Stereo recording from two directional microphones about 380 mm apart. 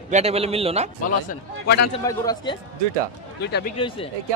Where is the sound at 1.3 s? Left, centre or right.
Left.